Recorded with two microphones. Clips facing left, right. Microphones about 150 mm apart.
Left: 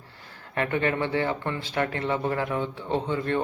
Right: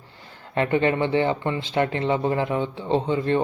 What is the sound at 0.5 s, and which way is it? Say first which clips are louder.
Speech: right 5 dB; 25° right (ahead or behind).